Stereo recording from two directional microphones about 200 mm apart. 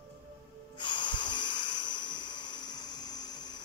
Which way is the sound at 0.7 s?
25° left (ahead or behind).